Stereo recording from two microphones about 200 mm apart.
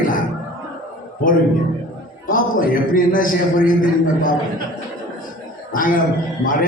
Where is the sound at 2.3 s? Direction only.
45° left (ahead or behind).